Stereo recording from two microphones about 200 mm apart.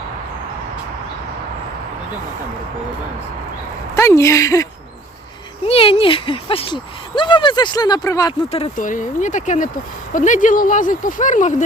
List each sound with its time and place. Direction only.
3.9 s speech: 15° left (ahead or behind)
5.6 s speech: 30° left (ahead or behind)
8.7 s speech: 40° left (ahead or behind)